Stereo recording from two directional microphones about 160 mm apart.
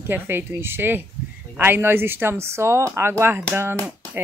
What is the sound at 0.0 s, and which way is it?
A woman's voice, 15° right (ahead or behind).